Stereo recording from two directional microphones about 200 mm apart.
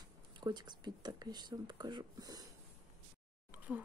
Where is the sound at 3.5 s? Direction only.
5° right (ahead or behind).